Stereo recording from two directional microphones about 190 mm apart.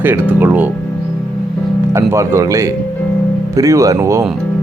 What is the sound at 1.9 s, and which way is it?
Speech, 15° right (ahead or behind).